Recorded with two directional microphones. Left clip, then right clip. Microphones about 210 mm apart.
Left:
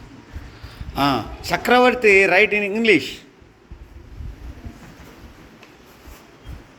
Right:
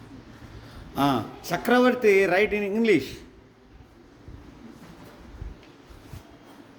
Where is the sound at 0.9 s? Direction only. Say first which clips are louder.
Left 4 dB; 10° right (ahead or behind).